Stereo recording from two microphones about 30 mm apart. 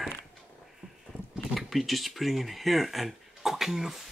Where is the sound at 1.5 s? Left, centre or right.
Centre.